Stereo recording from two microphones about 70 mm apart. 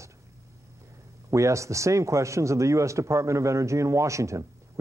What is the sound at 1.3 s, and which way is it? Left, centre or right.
Speech, right.